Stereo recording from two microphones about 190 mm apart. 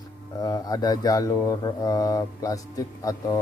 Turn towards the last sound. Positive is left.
turn(degrees=20)  # may be behind; listen again after turning